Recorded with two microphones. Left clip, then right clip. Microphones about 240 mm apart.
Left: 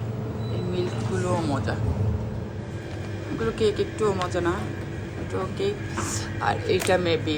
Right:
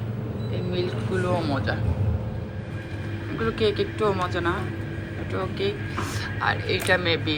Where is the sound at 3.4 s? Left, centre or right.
Centre.